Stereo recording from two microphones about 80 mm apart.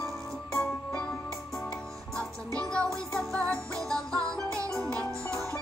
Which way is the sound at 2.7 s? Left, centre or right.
Centre.